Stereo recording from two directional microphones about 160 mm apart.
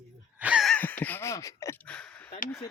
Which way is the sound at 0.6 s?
10° left (ahead or behind).